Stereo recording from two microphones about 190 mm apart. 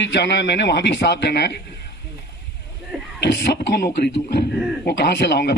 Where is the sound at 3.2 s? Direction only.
65° left (ahead or behind).